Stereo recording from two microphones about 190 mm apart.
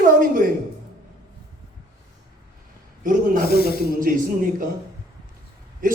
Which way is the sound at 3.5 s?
55° left (ahead or behind).